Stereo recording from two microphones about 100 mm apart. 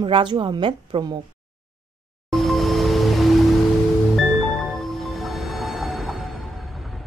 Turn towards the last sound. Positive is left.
turn(degrees=0)  # may be behind; listen again after turning